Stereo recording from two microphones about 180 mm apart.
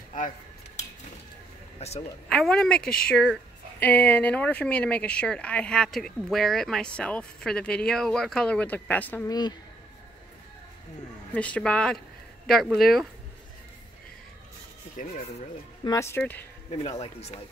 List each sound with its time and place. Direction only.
1.8 s speech: 35° left (ahead or behind)
2.2 s speech: 5° left (ahead or behind)
9.3 s speech: 20° left (ahead or behind)
11.3 s speech: 5° left (ahead or behind)
15.8 s speech: 20° left (ahead or behind)
16.7 s speech: 35° left (ahead or behind)